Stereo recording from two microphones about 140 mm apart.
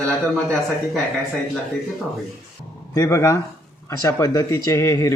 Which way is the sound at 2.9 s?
25° left (ahead or behind).